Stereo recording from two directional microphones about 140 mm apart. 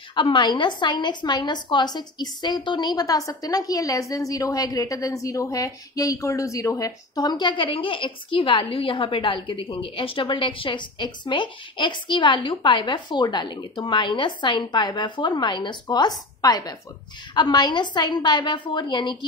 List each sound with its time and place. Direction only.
0.1 s a woman's voice: 35° left (ahead or behind)